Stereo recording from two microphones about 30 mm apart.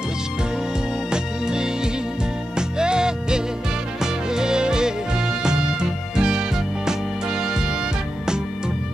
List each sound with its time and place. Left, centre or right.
1.1 s music: right